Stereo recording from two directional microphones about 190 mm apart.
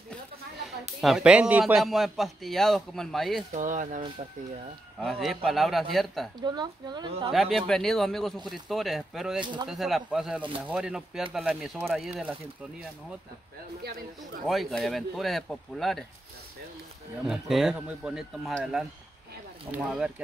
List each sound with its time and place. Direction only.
1.0 s speech: 5° right (ahead or behind)
3.5 s speech: 40° right (ahead or behind)
5.0 s speech: centre (ahead or behind)
6.4 s speech: 20° right (ahead or behind)
7.3 s speech: centre (ahead or behind)
9.4 s speech: 25° right (ahead or behind)
9.7 s speech: centre (ahead or behind)
14.5 s speech: centre (ahead or behind)
17.3 s speech: 5° right (ahead or behind)